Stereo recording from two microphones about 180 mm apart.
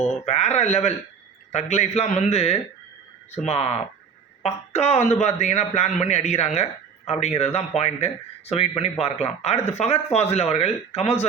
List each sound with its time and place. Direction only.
0.0 s speech: 40° left (ahead or behind)